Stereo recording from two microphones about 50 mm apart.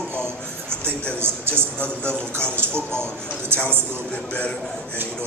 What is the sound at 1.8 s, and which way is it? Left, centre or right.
Speech, left.